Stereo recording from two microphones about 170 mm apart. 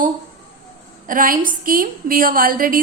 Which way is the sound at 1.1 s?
55° right (ahead or behind).